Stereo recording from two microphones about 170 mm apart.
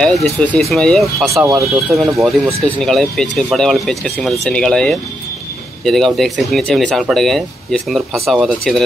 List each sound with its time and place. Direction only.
0.0 s speech: 5° left (ahead or behind)
1.3 s speech: 15° right (ahead or behind)
1.9 s speech: centre (ahead or behind)